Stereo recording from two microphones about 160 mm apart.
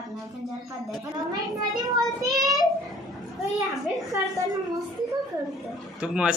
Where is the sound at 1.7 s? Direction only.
20° right (ahead or behind).